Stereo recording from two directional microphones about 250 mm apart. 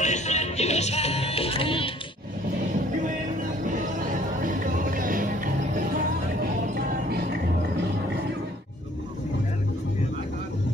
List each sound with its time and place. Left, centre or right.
0.0 s music: left
4.8 s music: right